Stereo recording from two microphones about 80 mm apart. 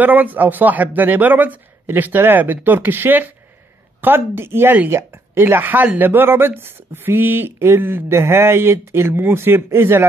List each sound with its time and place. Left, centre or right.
0.0 s speech: right